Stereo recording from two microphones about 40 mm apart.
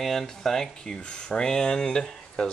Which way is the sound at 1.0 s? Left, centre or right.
Left.